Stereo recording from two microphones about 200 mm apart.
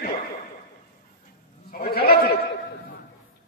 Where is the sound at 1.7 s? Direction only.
50° left (ahead or behind).